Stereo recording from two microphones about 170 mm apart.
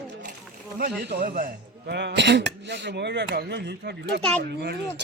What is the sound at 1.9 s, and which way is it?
Speech, 85° right.